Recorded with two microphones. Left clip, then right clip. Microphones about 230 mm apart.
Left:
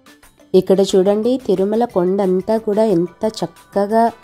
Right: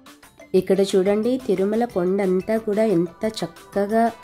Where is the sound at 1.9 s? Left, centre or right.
Centre.